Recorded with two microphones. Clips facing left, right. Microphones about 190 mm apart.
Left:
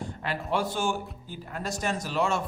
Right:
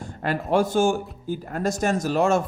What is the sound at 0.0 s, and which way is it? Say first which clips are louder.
A man's voice: right 6 dB; 45° right (ahead or behind).